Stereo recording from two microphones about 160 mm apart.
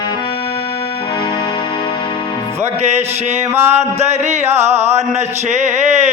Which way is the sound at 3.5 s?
15° right (ahead or behind).